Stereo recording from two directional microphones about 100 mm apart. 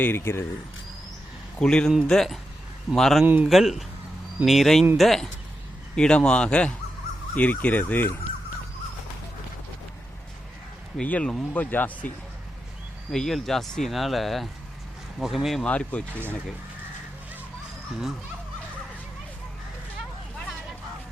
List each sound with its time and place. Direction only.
0.0 s speech: 25° left (ahead or behind)
1.5 s speech: 10° left (ahead or behind)
3.2 s speech: 15° right (ahead or behind)
3.5 s speech: centre (ahead or behind); by 8.1 s 20° left (ahead or behind)
10.9 s speech: 10° left (ahead or behind)
13.1 s speech: 5° left (ahead or behind)
15.6 s speech: 10° left (ahead or behind)